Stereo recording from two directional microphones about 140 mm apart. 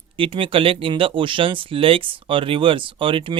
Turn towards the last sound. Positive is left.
turn(degrees=-40)  # may be behind; listen again after turning